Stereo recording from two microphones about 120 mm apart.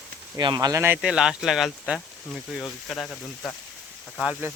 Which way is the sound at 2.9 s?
10° left (ahead or behind).